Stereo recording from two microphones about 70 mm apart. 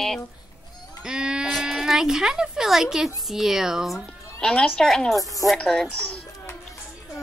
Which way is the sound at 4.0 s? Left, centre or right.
Centre.